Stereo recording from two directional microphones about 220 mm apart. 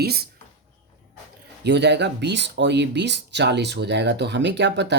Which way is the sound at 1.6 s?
50° right (ahead or behind).